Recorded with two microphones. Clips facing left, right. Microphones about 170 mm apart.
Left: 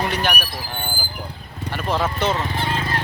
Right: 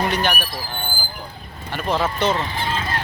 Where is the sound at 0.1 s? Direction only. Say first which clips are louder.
Right 1 dB; 5° left (ahead or behind).